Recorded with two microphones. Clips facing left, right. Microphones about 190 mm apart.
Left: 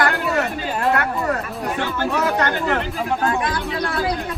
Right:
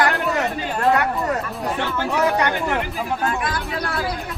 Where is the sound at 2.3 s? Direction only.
15° right (ahead or behind).